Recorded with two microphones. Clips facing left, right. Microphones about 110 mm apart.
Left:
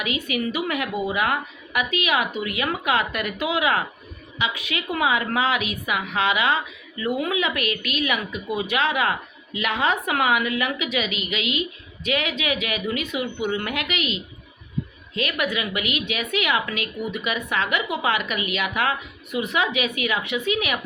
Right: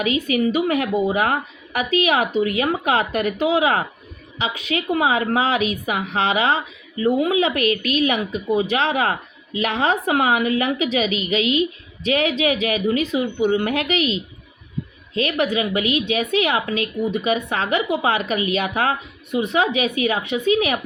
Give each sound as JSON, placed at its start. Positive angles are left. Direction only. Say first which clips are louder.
{"t": 0.0, "sound": "a woman's voice", "louder": "right 6 dB", "side_deg": -35}